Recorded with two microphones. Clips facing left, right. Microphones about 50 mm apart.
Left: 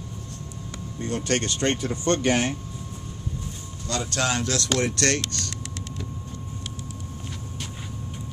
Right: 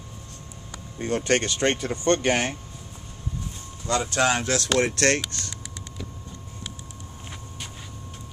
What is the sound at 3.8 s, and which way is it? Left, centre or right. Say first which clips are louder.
Speech: right 4 dB; centre.